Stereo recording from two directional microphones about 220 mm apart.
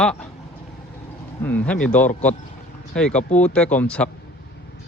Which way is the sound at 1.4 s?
5° left (ahead or behind).